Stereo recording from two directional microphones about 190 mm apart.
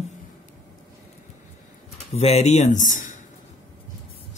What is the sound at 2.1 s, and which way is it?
Speech, 35° left (ahead or behind).